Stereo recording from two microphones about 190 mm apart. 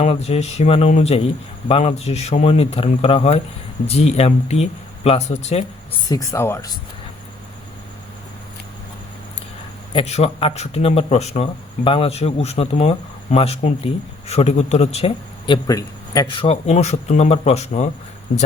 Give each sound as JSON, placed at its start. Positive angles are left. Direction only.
{"t": 0.0, "sound": "speech", "side_deg": 35}
{"t": 6.1, "sound": "speech", "side_deg": 15}
{"t": 9.9, "sound": "speech", "side_deg": 35}